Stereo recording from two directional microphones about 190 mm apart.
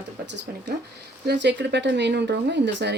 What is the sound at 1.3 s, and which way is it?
Speech, 65° right (ahead or behind).